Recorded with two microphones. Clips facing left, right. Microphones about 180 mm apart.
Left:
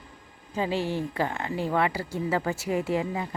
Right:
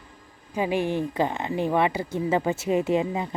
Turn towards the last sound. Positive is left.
turn(degrees=-20)  # may be behind; listen again after turning